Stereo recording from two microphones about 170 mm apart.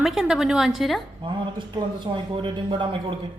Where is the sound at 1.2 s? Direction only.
25° right (ahead or behind).